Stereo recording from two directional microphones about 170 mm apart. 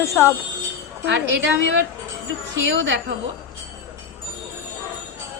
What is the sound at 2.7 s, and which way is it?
Speech, 90° right.